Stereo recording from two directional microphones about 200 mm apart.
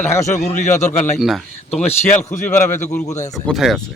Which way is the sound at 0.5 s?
35° left (ahead or behind).